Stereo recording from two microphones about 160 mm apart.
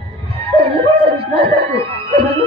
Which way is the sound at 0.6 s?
35° right (ahead or behind).